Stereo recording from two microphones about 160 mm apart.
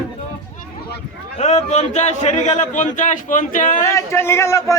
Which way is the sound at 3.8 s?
20° left (ahead or behind).